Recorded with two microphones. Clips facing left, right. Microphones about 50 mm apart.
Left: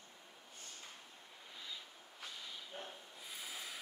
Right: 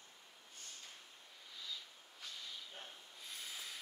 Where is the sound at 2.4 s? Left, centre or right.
Centre.